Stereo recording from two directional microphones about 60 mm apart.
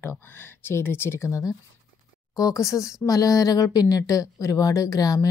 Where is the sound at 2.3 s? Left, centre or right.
Left.